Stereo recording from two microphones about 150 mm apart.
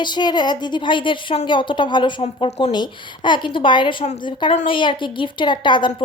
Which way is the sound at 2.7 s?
30° left (ahead or behind).